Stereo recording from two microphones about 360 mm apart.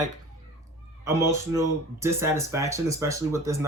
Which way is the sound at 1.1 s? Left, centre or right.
Centre.